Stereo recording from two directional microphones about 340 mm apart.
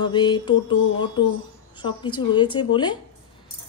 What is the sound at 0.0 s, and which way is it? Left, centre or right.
Speech, centre.